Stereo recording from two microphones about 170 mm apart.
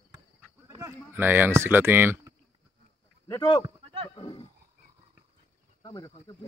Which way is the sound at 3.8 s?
30° right (ahead or behind).